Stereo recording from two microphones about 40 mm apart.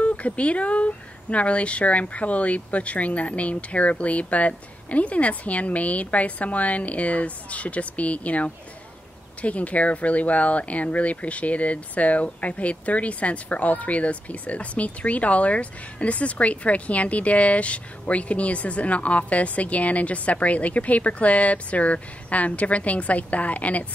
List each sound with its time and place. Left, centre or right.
0.0 s speech: left